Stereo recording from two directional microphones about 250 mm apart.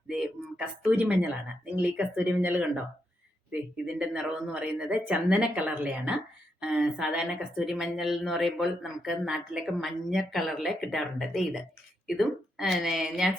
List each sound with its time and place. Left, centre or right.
0.1 s a sound: centre
1.7 s speech: centre
3.8 s a woman's voice: centre